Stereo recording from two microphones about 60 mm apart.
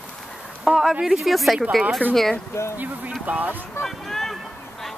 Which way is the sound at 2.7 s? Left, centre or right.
Right.